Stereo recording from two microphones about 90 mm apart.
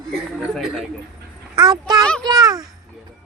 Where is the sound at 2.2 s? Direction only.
45° right (ahead or behind).